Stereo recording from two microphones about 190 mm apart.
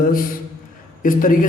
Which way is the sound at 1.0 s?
45° left (ahead or behind).